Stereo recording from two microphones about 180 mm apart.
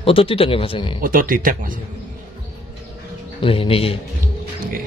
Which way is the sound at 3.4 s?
30° left (ahead or behind).